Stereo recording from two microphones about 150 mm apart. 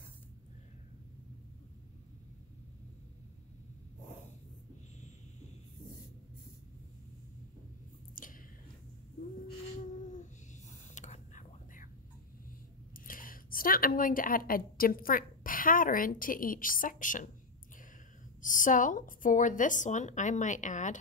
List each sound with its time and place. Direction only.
8.1 s squish: 65° left (ahead or behind)
9.2 s cat: 60° left (ahead or behind)
11.0 s whispering: 55° left (ahead or behind)
12.9 s speech: 65° left (ahead or behind)
18.4 s a woman's voice: 60° left (ahead or behind)